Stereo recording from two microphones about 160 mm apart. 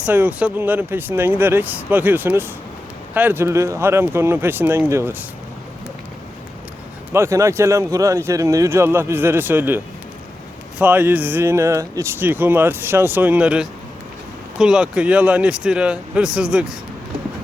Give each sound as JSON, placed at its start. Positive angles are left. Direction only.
{"t": 0.0, "sound": "speech", "side_deg": -10}
{"t": 7.1, "sound": "speech", "side_deg": -15}